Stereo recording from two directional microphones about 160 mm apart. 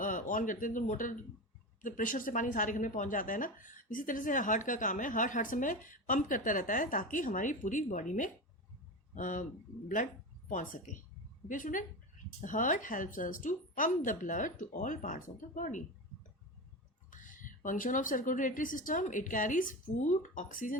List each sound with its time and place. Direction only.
0.0 s a woman's voice: 55° left (ahead or behind)
10.5 s a woman's voice: 55° left (ahead or behind)
17.1 s speech: 55° left (ahead or behind)